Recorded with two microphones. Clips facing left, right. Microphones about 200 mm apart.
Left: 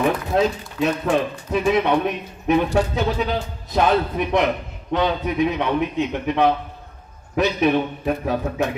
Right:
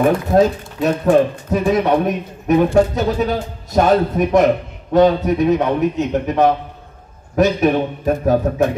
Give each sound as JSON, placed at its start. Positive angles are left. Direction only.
{"t": 0.3, "sound": "speech", "side_deg": -40}